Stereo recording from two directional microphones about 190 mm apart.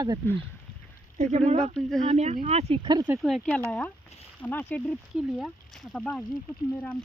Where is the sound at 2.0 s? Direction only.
35° right (ahead or behind).